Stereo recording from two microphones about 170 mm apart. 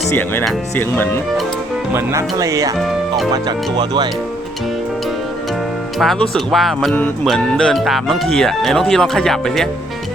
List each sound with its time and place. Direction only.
0.1 s speech: 10° left (ahead or behind)
1.9 s speech: 15° right (ahead or behind)
2.7 s speech: centre (ahead or behind)
3.3 s speech: 25° right (ahead or behind)
6.0 s speech: centre (ahead or behind)